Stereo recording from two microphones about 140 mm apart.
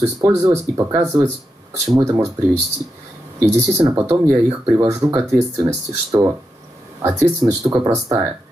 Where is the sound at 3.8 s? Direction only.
25° right (ahead or behind).